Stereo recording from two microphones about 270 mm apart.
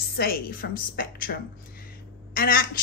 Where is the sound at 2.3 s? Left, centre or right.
Left.